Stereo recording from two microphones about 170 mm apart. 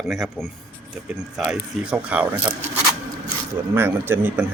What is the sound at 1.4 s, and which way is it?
A man's voice, 5° right (ahead or behind).